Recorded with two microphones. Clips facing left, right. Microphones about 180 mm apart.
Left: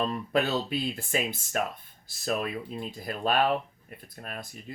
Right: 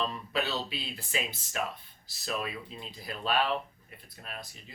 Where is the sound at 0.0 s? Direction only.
50° left (ahead or behind).